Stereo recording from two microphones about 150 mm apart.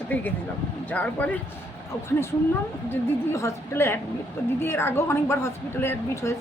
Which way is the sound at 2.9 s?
15° left (ahead or behind).